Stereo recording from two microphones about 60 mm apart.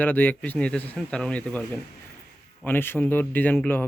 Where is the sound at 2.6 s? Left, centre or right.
Left.